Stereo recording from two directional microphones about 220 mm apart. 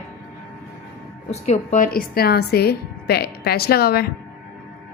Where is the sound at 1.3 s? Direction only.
30° left (ahead or behind).